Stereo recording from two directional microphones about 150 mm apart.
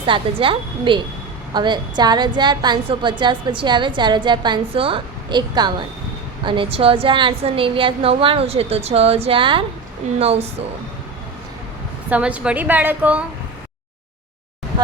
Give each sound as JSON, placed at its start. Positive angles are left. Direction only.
{"t": 0.0, "sound": "a woman's voice", "side_deg": -35}
{"t": 12.1, "sound": "a woman's voice", "side_deg": -10}